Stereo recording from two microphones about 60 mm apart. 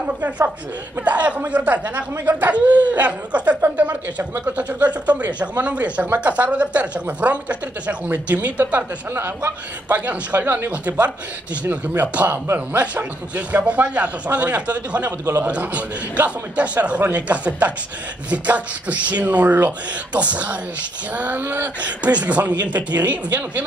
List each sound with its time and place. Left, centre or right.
0.0 s speech: right
9.1 s speech: right
9.8 s a man's voice: right
13.7 s a man's voice: right
21.8 s speech: right